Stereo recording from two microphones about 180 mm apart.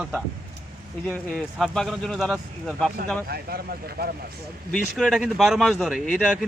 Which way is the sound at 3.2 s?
60° right (ahead or behind).